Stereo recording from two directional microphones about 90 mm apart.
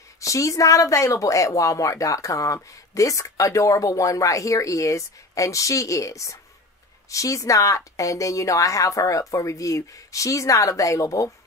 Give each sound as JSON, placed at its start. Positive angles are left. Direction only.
{"t": 0.2, "sound": "speech", "side_deg": 35}